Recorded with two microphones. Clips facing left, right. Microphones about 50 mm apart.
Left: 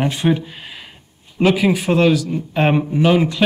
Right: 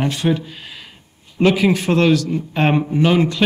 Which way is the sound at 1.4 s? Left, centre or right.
Centre.